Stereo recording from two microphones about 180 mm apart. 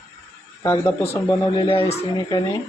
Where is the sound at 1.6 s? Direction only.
30° left (ahead or behind).